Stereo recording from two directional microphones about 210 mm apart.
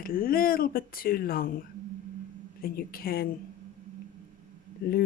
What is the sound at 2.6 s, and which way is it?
Speech, 45° left (ahead or behind).